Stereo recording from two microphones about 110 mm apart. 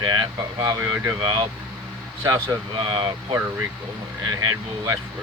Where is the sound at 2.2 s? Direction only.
35° right (ahead or behind).